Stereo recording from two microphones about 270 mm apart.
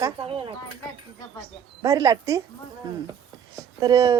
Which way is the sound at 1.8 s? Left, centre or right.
Centre.